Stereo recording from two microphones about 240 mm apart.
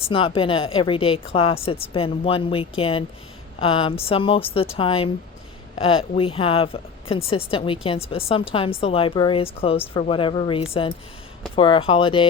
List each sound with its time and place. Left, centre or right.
0.0 s a woman's voice: left